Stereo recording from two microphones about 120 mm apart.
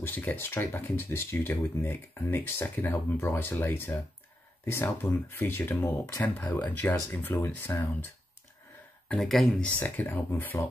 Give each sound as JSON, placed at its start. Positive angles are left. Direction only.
{"t": 0.0, "sound": "speech", "side_deg": 15}
{"t": 9.1, "sound": "speech", "side_deg": 0}
{"t": 9.7, "sound": "speech", "side_deg": 15}